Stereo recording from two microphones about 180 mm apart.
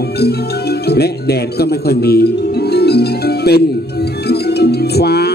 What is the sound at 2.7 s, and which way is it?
Music, 65° left (ahead or behind).